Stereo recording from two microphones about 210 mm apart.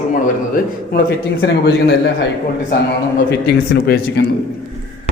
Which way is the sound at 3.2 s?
50° left (ahead or behind).